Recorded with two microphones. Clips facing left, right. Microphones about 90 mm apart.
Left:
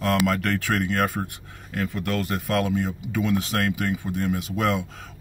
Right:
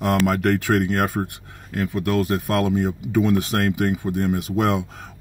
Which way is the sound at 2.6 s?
25° right (ahead or behind).